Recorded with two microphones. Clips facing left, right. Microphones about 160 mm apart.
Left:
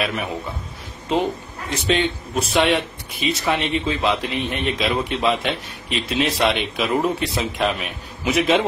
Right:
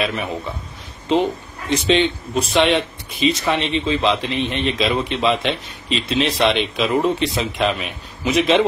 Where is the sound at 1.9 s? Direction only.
Centre (ahead or behind).